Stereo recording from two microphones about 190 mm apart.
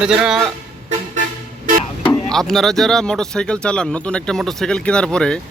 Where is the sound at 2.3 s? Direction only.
Centre (ahead or behind).